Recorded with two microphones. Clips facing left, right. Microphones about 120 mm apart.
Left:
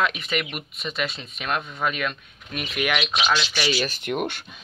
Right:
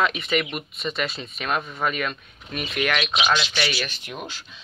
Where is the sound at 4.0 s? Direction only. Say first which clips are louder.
Left 9 dB; 60° left (ahead or behind).